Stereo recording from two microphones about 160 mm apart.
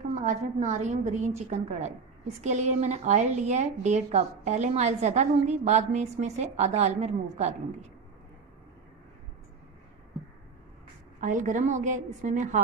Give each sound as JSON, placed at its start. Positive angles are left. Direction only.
{"t": 0.1, "sound": "a woman's voice", "side_deg": -50}
{"t": 11.1, "sound": "a woman's voice", "side_deg": -55}